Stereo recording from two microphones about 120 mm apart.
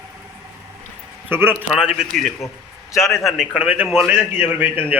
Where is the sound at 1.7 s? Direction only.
5° right (ahead or behind).